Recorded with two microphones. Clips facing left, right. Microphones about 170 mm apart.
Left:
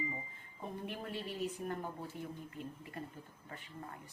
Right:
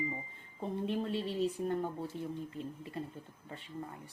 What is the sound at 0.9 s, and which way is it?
Speech, 25° right (ahead or behind).